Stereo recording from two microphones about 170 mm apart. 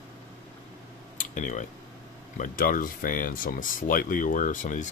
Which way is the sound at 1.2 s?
50° left (ahead or behind).